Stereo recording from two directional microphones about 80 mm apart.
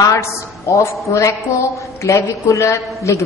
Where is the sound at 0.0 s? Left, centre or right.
Left.